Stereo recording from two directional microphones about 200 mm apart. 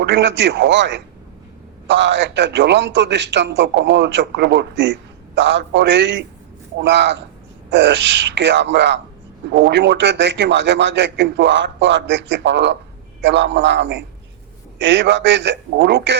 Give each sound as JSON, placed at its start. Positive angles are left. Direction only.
{"t": 0.0, "sound": "a man's voice", "side_deg": -60}